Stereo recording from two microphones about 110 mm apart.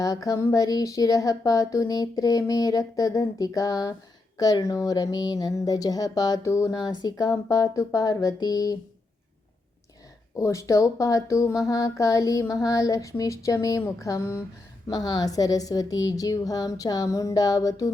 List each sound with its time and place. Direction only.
0.0 s speech: 30° left (ahead or behind)
6.7 s speech: 40° left (ahead or behind)
10.3 s speech: 30° left (ahead or behind)
14.8 s speech: 35° left (ahead or behind)